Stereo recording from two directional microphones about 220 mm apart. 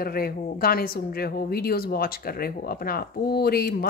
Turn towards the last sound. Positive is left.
turn(degrees=45)  # may be behind; listen again after turning